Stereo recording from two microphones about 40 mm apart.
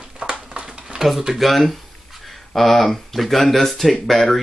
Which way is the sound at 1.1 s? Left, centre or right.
Centre.